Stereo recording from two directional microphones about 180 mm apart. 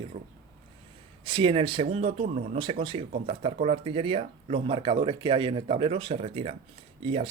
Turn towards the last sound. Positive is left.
turn(degrees=-30)  # may be behind; listen again after turning